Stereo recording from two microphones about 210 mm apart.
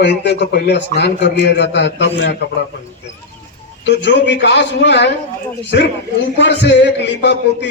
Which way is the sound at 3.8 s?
55° left (ahead or behind).